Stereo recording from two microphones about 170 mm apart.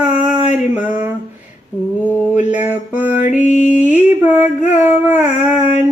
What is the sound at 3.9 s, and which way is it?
Mantra, 10° right (ahead or behind).